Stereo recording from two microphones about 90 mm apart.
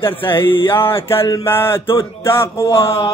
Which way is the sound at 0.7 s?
25° left (ahead or behind).